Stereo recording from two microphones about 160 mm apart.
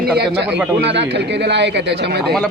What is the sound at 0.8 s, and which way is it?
Speech, 90° right.